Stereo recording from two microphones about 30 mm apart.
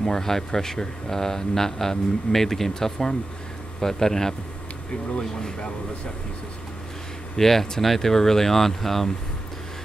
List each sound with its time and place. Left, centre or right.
0.0 s speech: centre
7.3 s speech: centre